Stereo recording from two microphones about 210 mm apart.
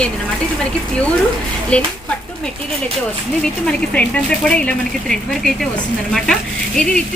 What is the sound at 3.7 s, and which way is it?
A woman's voice, 5° left (ahead or behind).